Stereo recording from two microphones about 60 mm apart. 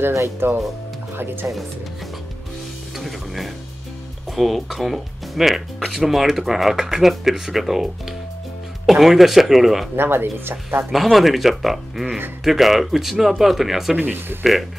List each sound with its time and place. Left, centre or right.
0.4 s speech: right
3.0 s speech: centre
9.9 s speech: right
10.9 s speech: centre
13.9 s speech: right